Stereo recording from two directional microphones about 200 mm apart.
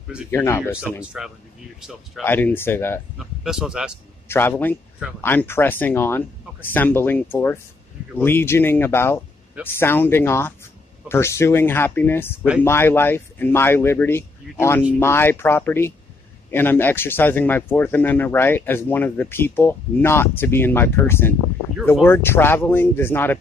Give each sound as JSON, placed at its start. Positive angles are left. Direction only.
{"t": 0.3, "sound": "speech", "side_deg": 10}
{"t": 1.1, "sound": "speech", "side_deg": -5}
{"t": 2.2, "sound": "speech", "side_deg": 10}
{"t": 3.2, "sound": "speech", "side_deg": -5}
{"t": 4.3, "sound": "speech", "side_deg": 10}